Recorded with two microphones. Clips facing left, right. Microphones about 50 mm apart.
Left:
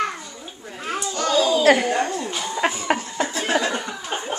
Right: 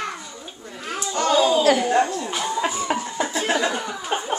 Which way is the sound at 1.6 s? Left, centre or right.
Left.